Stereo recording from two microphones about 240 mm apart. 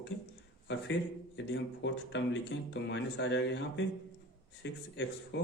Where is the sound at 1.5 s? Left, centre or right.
Left.